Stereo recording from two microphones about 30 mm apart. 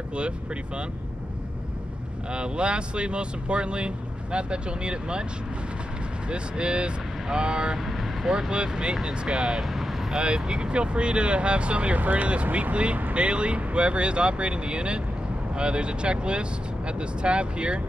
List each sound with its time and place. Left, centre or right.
2.3 s speech: right
6.2 s speech: right
9.6 s vehicle: centre
10.1 s speech: right
12.0 s speech: right